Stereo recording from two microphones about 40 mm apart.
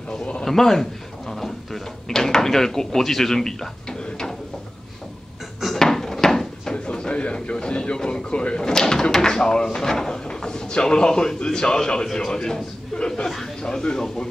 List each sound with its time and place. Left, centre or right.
0.5 s speech: centre
5.8 s a sound: centre
6.9 s a man's voice: left